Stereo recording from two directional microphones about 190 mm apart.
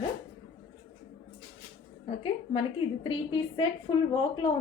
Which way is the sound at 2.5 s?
30° left (ahead or behind).